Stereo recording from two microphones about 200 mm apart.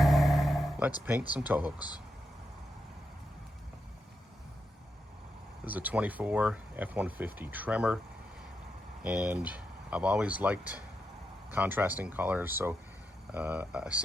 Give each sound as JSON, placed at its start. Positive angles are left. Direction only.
{"t": 0.0, "sound": "vehicle", "side_deg": 0}
{"t": 5.6, "sound": "speech", "side_deg": -10}
{"t": 9.0, "sound": "speech", "side_deg": -5}